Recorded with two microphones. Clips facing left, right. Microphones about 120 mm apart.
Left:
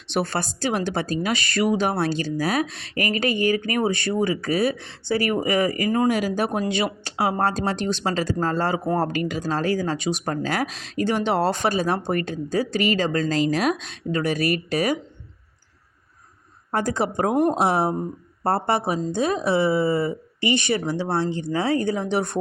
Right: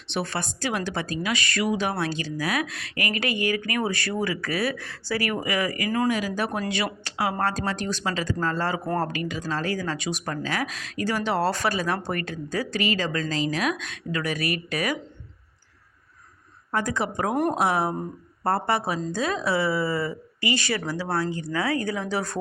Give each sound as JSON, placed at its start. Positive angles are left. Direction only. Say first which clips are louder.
{"t": 0.1, "sound": "speech", "louder": "left 4 dB", "side_deg": 40}
{"t": 9.1, "sound": "speech", "louder": "left 5 dB", "side_deg": 45}
{"t": 9.4, "sound": "speech", "louder": "left 5 dB", "side_deg": 35}
{"t": 13.1, "sound": "speech", "louder": "left 5 dB", "side_deg": 45}
{"t": 16.7, "sound": "speech", "louder": "left 3 dB", "side_deg": 35}